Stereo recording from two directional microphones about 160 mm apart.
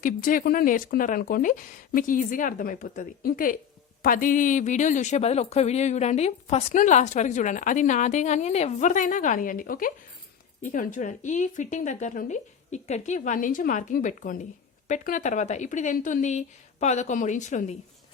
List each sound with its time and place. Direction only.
0.0 s a woman's voice: 60° left (ahead or behind)